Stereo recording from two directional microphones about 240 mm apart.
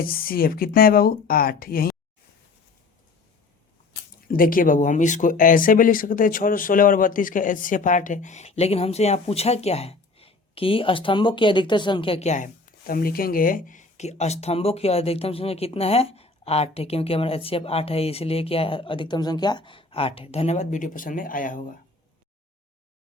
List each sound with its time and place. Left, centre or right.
0.0 s speech: left
4.3 s speech: left